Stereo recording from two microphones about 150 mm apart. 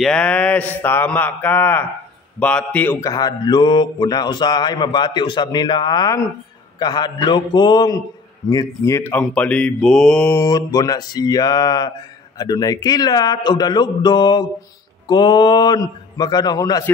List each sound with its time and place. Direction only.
0.0 s mantra: 5° left (ahead or behind)
3.0 s speech: 25° left (ahead or behind)